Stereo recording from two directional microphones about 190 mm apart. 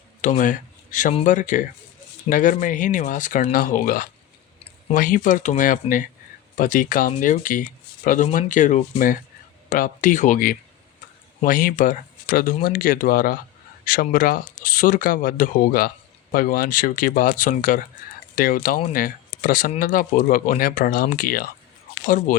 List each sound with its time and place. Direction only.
0.2 s speech: 40° left (ahead or behind)